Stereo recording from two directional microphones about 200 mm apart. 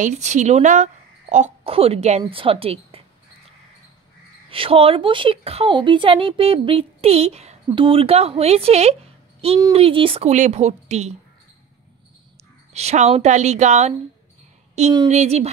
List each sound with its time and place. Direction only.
0.0 s a woman's voice: 35° right (ahead or behind)
4.5 s a woman's voice: 25° right (ahead or behind)
12.7 s a woman's voice: 35° right (ahead or behind)
15.0 s a woman's voice: 30° right (ahead or behind)